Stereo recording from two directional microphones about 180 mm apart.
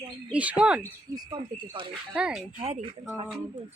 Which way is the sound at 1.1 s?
25° right (ahead or behind).